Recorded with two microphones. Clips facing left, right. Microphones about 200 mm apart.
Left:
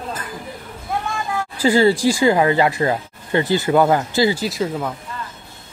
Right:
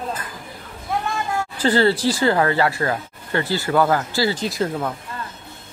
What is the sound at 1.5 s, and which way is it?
Speech, 10° left (ahead or behind).